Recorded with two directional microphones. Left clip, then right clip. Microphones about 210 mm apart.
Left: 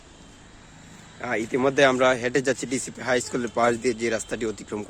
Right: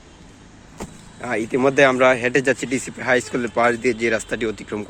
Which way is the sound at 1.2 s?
10° left (ahead or behind).